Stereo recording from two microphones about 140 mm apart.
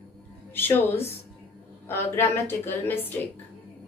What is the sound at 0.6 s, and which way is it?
Speech, 15° left (ahead or behind).